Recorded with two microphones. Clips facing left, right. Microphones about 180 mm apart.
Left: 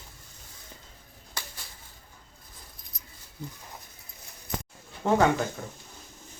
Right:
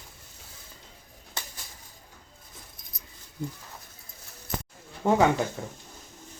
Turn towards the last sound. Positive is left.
turn(degrees=-15)  # may be behind; listen again after turning